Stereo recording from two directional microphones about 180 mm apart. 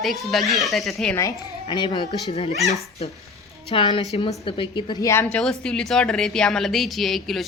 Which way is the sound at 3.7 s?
30° left (ahead or behind).